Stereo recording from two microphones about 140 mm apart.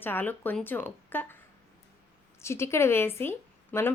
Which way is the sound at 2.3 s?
20° left (ahead or behind).